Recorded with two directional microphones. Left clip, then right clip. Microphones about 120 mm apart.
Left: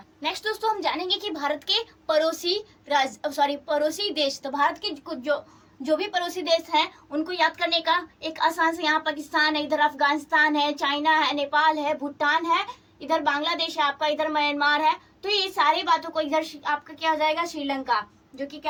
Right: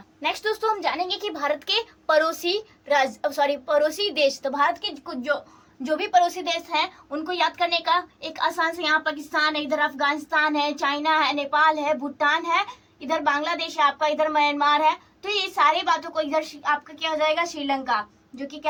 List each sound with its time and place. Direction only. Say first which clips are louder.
0.2 s a woman's voice: right 3 dB; 50° right (ahead or behind); by 18.7 s 15° right (ahead or behind)